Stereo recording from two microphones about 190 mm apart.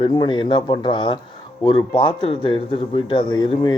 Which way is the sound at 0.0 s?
25° left (ahead or behind).